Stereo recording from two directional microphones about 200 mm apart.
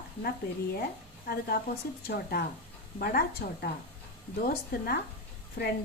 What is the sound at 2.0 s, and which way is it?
A woman's voice, 50° left (ahead or behind).